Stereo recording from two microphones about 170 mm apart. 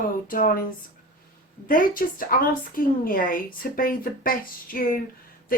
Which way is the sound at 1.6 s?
55° left (ahead or behind).